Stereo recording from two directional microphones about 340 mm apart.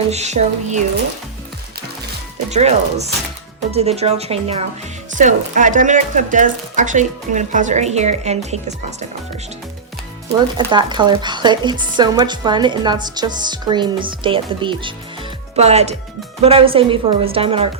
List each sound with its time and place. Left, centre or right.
0.1 s speech: centre
2.5 s speech: centre
10.7 s speech: centre